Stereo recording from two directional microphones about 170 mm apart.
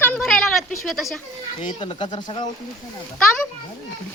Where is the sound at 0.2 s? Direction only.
Centre (ahead or behind).